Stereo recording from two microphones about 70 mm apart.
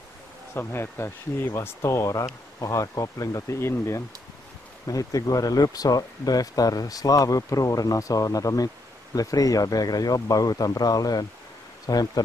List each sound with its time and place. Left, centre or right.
0.6 s speech: left
1.8 s speech: left
4.8 s speech: left